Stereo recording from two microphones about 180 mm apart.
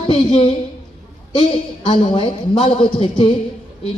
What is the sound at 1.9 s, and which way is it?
A man's voice, 30° left (ahead or behind).